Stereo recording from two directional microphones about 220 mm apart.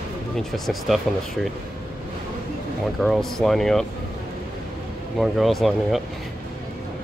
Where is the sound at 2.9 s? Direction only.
Centre (ahead or behind).